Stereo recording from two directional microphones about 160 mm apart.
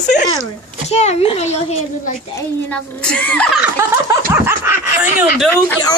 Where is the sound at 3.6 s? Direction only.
15° right (ahead or behind).